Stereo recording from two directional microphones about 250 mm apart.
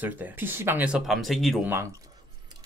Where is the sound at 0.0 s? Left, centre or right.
Centre.